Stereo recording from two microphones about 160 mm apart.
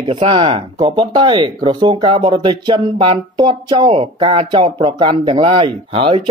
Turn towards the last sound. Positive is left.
turn(degrees=-35)  # may be behind; listen again after turning